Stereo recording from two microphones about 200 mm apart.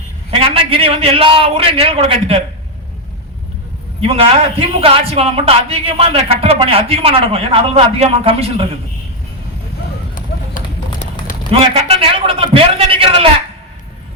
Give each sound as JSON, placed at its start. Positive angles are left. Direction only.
{"t": 0.3, "sound": "a man's voice", "side_deg": -30}
{"t": 4.0, "sound": "a man's voice", "side_deg": -30}
{"t": 10.6, "sound": "run", "side_deg": 40}
{"t": 11.6, "sound": "a man's voice", "side_deg": -30}